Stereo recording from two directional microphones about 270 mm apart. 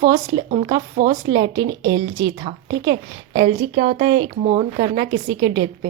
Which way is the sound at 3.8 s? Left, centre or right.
Right.